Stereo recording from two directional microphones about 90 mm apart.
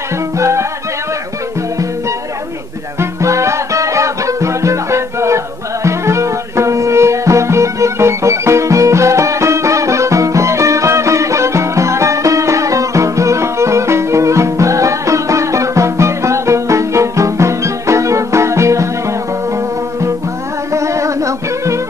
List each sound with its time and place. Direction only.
0.4 s music: 30° right (ahead or behind)
3.0 s music: 35° right (ahead or behind)